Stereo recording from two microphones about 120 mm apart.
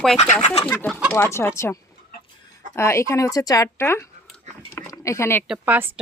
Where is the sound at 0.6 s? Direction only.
10° left (ahead or behind).